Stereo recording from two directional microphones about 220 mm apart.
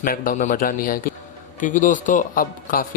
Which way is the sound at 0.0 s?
40° left (ahead or behind).